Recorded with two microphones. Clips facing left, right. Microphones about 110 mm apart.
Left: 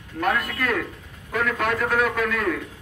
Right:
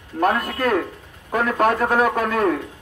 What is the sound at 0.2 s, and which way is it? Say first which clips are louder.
A man's voice: right 5 dB; 40° right (ahead or behind).